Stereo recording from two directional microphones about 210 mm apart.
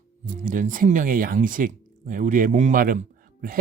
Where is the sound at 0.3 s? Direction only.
40° right (ahead or behind).